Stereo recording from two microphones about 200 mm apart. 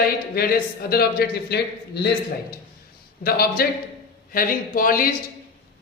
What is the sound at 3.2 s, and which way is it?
A woman's voice, 50° left (ahead or behind).